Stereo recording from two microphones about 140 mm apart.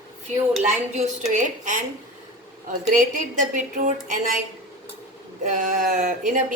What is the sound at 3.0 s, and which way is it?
Speech, 65° right (ahead or behind).